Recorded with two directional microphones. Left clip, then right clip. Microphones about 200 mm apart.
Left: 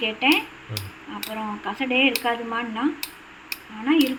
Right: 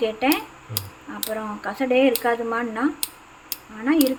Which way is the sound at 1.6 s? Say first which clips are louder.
Right 2 dB; 35° right (ahead or behind).